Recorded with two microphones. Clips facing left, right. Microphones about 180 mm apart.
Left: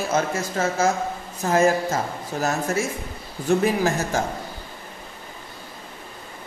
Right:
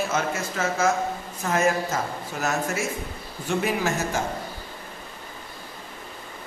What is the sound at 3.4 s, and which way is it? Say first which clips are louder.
Speech: left 5 dB; 40° left (ahead or behind).